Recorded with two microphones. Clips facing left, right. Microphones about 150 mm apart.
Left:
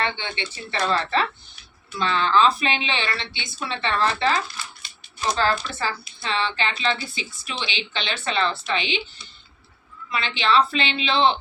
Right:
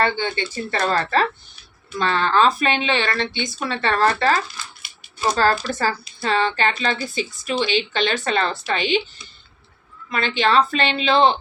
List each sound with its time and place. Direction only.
0.0 s speech: 40° right (ahead or behind)
5.6 s speech: 40° right (ahead or behind)
10.1 s speech: 45° right (ahead or behind)